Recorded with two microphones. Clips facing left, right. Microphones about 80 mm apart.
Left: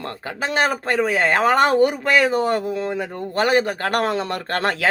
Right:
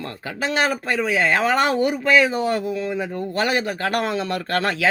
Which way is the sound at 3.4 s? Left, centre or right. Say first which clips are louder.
Left 4 dB; left.